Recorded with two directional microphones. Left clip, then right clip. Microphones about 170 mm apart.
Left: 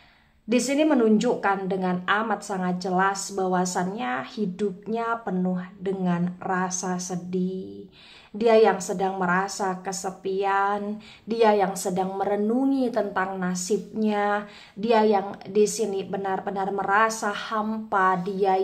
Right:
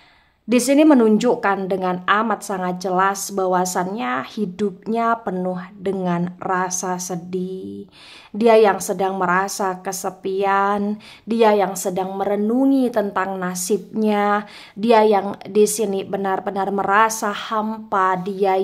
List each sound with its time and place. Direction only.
0.5 s a woman's voice: 35° right (ahead or behind)